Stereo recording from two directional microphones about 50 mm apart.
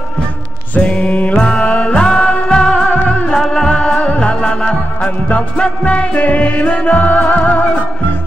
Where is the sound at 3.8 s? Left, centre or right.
Left.